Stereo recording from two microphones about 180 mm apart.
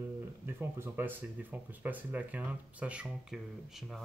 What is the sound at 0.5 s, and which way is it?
Speech, 10° right (ahead or behind).